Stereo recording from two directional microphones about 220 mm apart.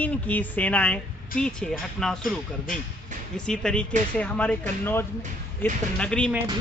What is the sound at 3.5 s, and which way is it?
Speech, 5° left (ahead or behind).